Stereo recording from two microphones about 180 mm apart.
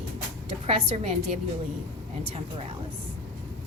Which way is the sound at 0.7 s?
35° right (ahead or behind).